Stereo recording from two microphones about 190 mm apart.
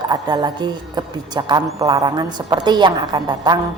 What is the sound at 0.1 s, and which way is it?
A woman's voice, 20° right (ahead or behind).